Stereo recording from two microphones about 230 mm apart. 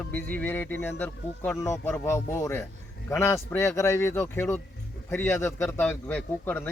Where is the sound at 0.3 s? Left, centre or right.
Centre.